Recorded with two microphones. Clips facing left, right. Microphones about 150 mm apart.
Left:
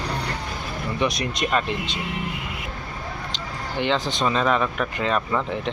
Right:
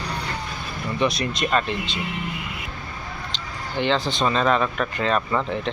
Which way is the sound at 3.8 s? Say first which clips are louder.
Right 1 dB; 15° left (ahead or behind).